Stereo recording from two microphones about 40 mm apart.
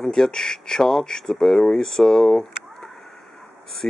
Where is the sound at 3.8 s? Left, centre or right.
Left.